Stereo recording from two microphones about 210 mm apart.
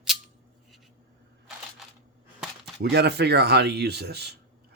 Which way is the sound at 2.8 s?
50° right (ahead or behind).